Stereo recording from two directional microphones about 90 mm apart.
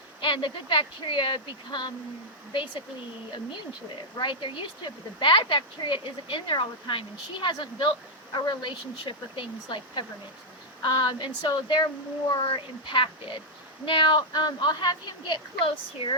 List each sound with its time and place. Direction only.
0.2 s a woman's voice: 65° left (ahead or behind)
4.2 s a woman's voice: 65° left (ahead or behind)
12.4 s a woman's voice: 70° left (ahead or behind)